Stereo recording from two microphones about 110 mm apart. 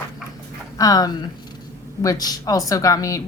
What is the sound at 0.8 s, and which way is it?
A woman's voice, 35° left (ahead or behind).